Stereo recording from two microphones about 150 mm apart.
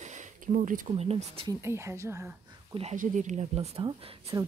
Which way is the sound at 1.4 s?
20° right (ahead or behind).